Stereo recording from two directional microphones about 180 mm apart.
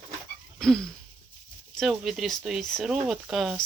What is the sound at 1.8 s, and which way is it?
Speech, centre (ahead or behind).